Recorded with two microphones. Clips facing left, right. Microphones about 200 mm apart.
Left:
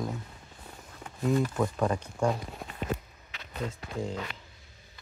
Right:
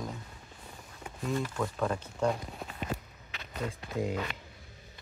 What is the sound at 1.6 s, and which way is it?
Speech, 15° left (ahead or behind).